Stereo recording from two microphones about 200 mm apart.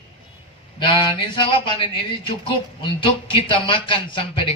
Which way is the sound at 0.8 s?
25° left (ahead or behind).